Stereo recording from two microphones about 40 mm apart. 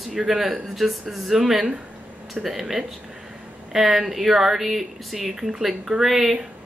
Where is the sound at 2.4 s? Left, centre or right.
Centre.